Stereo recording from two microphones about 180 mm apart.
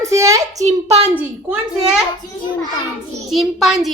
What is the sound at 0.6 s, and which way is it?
Speech, 35° right (ahead or behind).